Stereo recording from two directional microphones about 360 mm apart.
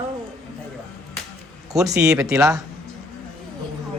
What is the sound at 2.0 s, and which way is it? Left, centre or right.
Speech, centre.